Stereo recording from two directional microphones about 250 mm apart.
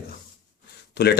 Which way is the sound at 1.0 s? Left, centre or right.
Left.